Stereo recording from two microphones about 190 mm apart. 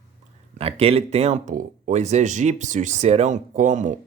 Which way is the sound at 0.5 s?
30° right (ahead or behind).